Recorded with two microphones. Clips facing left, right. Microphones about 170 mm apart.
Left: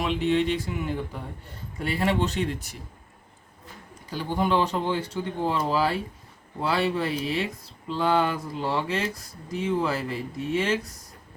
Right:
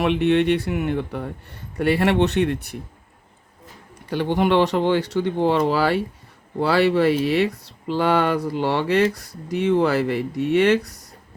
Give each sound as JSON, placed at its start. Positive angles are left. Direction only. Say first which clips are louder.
{"t": 0.0, "sound": "speech", "louder": "right 6 dB", "side_deg": -65}
{"t": 4.1, "sound": "speech", "louder": "right 6 dB", "side_deg": -70}